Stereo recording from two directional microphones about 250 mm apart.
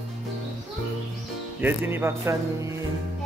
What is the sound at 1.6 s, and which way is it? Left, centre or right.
Music, centre.